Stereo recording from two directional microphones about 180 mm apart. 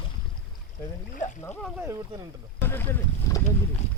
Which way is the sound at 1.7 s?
15° right (ahead or behind).